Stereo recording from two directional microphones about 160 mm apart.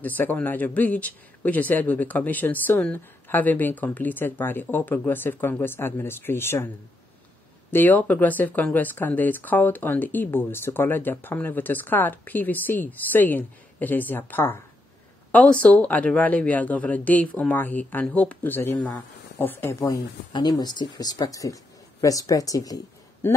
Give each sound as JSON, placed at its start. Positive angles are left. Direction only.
{"t": 0.0, "sound": "speech", "side_deg": 10}
{"t": 7.7, "sound": "speech", "side_deg": 10}
{"t": 20.3, "sound": "speech", "side_deg": 25}